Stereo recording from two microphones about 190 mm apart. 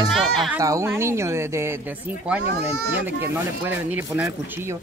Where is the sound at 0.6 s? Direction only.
15° right (ahead or behind).